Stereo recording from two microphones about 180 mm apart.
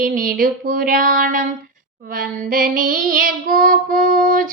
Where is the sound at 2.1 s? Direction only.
55° right (ahead or behind).